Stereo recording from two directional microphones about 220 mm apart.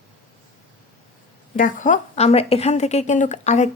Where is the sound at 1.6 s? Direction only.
35° left (ahead or behind).